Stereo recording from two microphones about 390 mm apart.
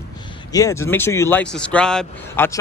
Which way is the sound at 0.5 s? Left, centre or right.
Centre.